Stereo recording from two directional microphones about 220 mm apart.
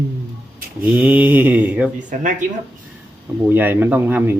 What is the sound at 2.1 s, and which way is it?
Speech, 35° right (ahead or behind).